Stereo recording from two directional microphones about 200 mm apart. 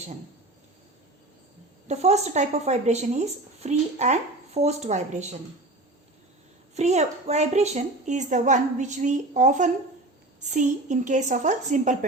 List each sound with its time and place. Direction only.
1.9 s speech: 35° right (ahead or behind)
6.7 s speech: 35° right (ahead or behind)